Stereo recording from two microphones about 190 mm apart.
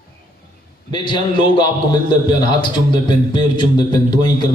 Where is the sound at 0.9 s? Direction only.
25° left (ahead or behind).